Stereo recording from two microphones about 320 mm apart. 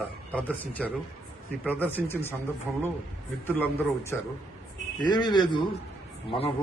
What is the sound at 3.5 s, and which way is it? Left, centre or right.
A man's voice, centre.